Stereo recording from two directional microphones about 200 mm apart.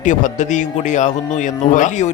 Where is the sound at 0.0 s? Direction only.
40° left (ahead or behind).